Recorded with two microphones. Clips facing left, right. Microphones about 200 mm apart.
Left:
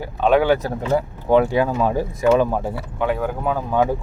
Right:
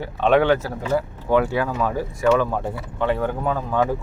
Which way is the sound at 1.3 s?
20° left (ahead or behind).